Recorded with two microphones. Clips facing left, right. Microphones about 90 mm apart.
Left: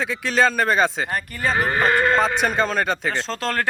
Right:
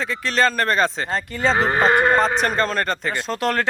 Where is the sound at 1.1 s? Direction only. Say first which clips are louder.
Right 3 dB; 25° right (ahead or behind).